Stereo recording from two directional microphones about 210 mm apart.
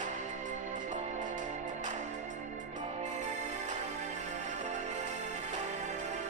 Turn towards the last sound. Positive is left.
turn(degrees=-35)  # may be behind; listen again after turning